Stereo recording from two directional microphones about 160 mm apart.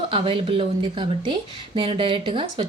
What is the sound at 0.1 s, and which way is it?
Speech, 35° right (ahead or behind).